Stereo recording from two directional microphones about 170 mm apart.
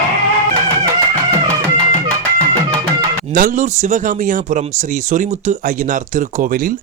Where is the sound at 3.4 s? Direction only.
45° right (ahead or behind).